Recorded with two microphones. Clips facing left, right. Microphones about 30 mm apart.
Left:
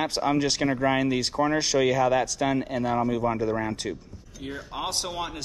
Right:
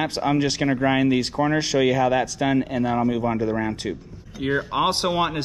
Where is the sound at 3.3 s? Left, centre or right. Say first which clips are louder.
Right 3 dB; right.